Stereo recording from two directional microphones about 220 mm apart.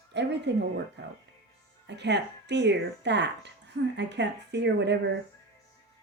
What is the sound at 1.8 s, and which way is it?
Speech, 50° right (ahead or behind).